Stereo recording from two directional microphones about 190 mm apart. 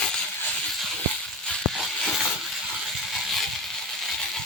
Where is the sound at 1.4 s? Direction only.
5° left (ahead or behind).